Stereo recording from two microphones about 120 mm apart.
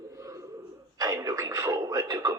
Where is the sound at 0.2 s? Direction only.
25° right (ahead or behind).